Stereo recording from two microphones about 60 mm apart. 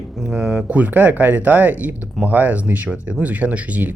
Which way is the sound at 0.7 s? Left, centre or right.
Right.